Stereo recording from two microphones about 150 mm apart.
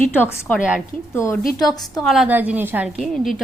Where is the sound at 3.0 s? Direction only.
Centre (ahead or behind).